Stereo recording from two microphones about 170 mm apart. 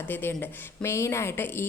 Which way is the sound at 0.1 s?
10° left (ahead or behind).